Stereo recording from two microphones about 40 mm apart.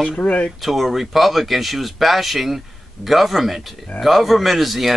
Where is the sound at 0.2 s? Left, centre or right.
Left.